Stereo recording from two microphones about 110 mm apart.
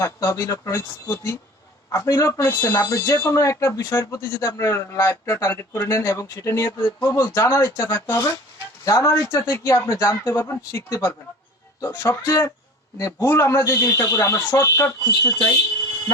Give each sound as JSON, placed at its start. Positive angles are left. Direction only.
{"t": 0.0, "sound": "speech", "side_deg": 25}
{"t": 6.7, "sound": "speech", "side_deg": 15}
{"t": 7.0, "sound": "speech", "side_deg": 30}